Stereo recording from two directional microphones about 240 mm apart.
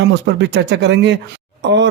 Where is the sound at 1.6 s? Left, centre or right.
Right.